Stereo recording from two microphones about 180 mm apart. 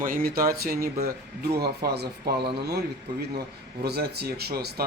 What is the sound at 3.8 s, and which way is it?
Speech, 65° right (ahead or behind).